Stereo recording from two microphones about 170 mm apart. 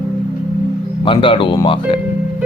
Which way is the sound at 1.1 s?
30° left (ahead or behind).